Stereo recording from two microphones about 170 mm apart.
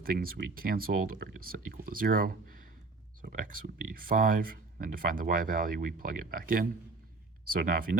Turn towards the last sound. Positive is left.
turn(degrees=-55)  # may be behind; listen again after turning